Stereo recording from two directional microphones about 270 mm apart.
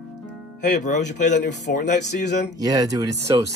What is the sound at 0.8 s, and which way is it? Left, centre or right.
Speech, left.